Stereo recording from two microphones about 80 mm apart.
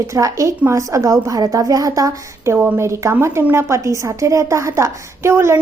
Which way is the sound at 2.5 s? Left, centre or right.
Right.